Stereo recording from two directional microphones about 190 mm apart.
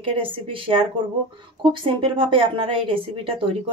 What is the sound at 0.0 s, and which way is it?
A woman's voice, 30° right (ahead or behind).